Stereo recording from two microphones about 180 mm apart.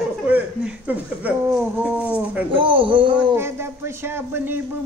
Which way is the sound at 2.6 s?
30° right (ahead or behind).